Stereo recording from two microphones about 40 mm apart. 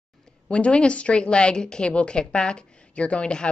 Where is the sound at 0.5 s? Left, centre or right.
Left.